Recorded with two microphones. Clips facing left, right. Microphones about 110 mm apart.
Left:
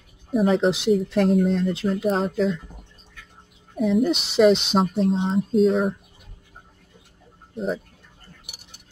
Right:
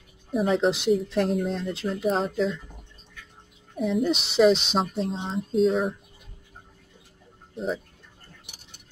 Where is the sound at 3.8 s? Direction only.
Centre (ahead or behind).